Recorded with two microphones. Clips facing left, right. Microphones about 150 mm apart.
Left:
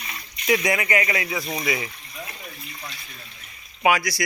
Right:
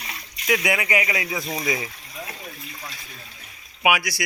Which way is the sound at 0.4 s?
5° right (ahead or behind).